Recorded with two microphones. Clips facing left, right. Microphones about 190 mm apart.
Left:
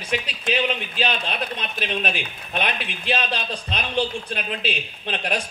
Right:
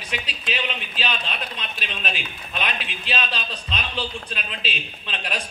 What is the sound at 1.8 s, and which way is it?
A man's voice, 50° left (ahead or behind).